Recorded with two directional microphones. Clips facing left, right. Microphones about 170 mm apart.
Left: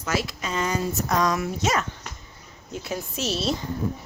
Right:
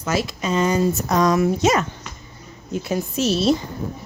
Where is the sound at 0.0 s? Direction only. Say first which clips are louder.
Right 4 dB; 20° right (ahead or behind).